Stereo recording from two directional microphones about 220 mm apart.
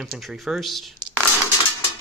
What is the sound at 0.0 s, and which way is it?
Speech, centre (ahead or behind).